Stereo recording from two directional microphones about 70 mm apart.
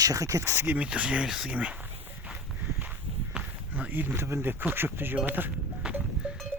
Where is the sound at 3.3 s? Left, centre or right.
Centre.